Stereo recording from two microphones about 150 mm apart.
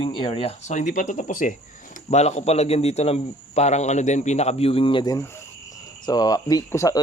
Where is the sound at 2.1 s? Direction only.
50° left (ahead or behind).